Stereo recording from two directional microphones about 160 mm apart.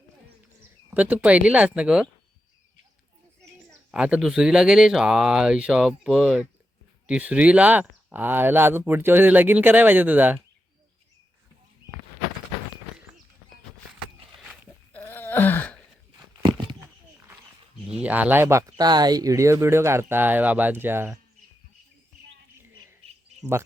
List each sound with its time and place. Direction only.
0.9 s speech: 10° right (ahead or behind)
3.7 s speech: 5° right (ahead or behind)
14.3 s a sound: centre (ahead or behind)
14.9 s wail: 10° left (ahead or behind)
16.4 s a sound: 25° right (ahead or behind)
17.9 s speech: 10° right (ahead or behind)